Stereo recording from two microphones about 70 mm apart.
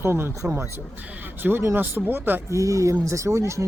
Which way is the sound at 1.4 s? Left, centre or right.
Right.